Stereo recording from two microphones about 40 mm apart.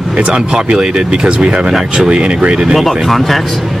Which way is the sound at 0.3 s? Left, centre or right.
Right.